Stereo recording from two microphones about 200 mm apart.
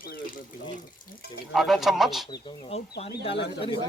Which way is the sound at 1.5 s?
Centre (ahead or behind).